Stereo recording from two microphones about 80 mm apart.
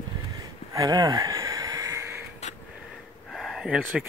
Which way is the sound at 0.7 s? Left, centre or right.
Right.